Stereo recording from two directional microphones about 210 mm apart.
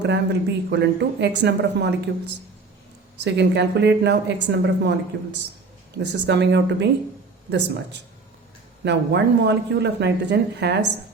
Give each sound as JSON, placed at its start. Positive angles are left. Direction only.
{"t": 0.0, "sound": "a woman's voice", "side_deg": -55}
{"t": 3.2, "sound": "a woman's voice", "side_deg": -55}
{"t": 8.8, "sound": "a woman's voice", "side_deg": -55}